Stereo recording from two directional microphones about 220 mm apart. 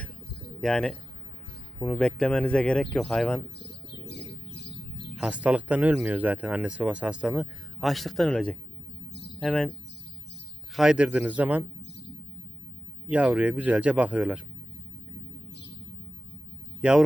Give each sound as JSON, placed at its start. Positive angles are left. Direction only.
{"t": 0.6, "sound": "speech", "side_deg": 5}
{"t": 3.6, "sound": "bird", "side_deg": 50}
{"t": 5.1, "sound": "speech", "side_deg": -5}
{"t": 10.8, "sound": "speech", "side_deg": -5}
{"t": 13.1, "sound": "speech", "side_deg": -5}
{"t": 16.8, "sound": "speech", "side_deg": -5}